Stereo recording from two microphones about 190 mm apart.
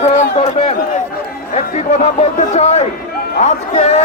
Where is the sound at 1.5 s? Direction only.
35° left (ahead or behind).